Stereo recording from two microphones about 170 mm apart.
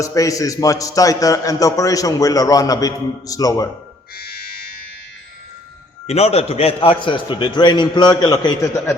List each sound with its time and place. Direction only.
0.0 s a man's voice: 20° left (ahead or behind)
4.2 s frog: 65° left (ahead or behind)
6.1 s a man's voice: 35° left (ahead or behind); by 9.0 s 20° left (ahead or behind)